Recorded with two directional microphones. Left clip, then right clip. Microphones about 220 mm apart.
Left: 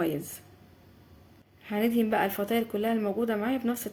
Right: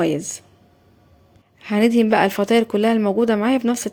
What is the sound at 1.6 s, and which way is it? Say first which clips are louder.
Speech: right 10 dB; 40° right (ahead or behind).